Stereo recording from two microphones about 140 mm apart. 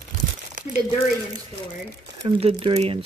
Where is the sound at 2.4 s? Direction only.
40° right (ahead or behind).